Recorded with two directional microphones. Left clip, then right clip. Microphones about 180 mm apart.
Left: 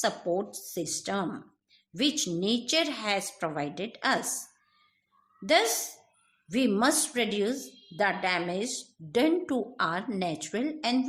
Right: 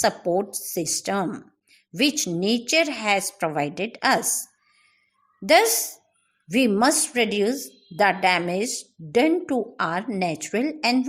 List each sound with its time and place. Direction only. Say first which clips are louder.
0.0 s a woman's voice: right 7 dB; 35° right (ahead or behind)
5.5 s a woman's voice: right 7 dB; 40° right (ahead or behind)